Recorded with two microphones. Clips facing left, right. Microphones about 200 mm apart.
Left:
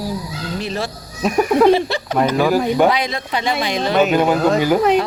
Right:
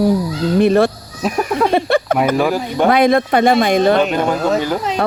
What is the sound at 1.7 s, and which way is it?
Speech, 55° right (ahead or behind).